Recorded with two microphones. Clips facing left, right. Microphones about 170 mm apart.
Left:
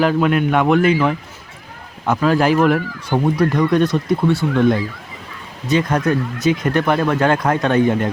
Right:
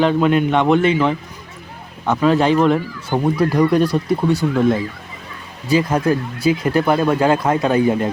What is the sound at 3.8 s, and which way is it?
Speech, 35° right (ahead or behind).